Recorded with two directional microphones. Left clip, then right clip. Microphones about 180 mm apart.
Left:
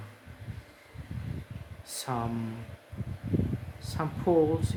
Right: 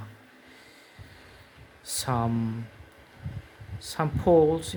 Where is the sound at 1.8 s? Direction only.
55° right (ahead or behind).